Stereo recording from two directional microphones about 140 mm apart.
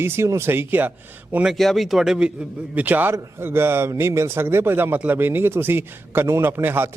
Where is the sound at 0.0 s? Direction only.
20° right (ahead or behind).